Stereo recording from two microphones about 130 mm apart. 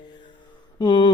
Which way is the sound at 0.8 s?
35° left (ahead or behind).